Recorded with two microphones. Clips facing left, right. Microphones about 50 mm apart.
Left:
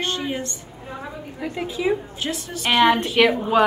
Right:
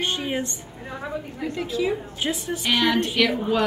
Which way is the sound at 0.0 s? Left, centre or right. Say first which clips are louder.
Even; centre.